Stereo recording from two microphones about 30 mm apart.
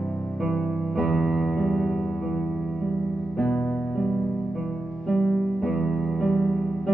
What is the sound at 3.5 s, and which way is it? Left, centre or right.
Music, centre.